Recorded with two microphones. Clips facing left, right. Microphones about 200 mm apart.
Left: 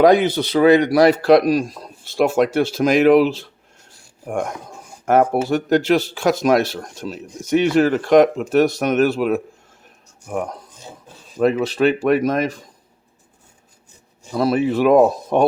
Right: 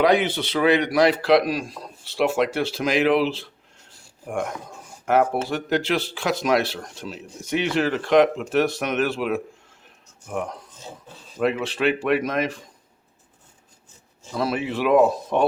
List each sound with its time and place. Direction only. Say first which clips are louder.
0.0 s speech: left 6 dB; 40° left (ahead or behind)
5.0 s speech: left 4 dB; 45° left (ahead or behind)
14.3 s speech: left 7 dB; 40° left (ahead or behind)